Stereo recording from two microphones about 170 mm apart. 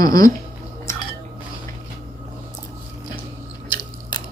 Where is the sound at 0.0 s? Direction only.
20° left (ahead or behind).